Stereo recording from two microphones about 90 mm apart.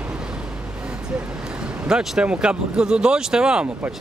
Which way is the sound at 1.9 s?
10° right (ahead or behind).